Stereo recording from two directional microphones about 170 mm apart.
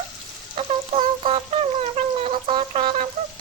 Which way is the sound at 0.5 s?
35° right (ahead or behind).